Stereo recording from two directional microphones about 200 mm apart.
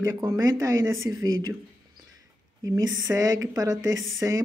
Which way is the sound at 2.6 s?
20° right (ahead or behind).